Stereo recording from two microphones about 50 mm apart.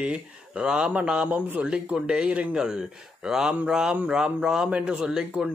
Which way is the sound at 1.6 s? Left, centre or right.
Centre.